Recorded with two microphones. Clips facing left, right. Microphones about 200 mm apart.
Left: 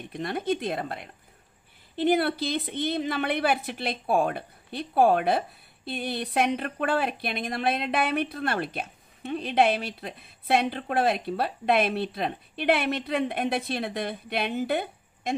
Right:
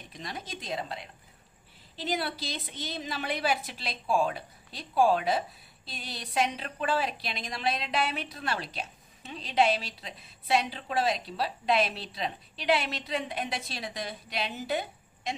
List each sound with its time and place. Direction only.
0.1 s a woman's voice: 55° left (ahead or behind)